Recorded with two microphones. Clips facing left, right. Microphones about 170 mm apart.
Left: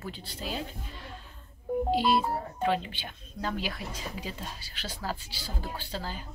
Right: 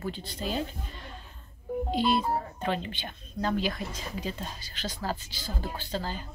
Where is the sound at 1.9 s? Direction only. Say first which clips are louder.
Right 1 dB; 5° left (ahead or behind).